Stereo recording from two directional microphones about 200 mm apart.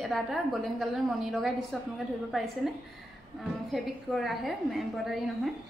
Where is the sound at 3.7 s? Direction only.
Centre (ahead or behind).